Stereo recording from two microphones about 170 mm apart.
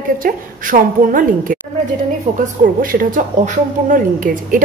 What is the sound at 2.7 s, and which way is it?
Speech, 55° right (ahead or behind).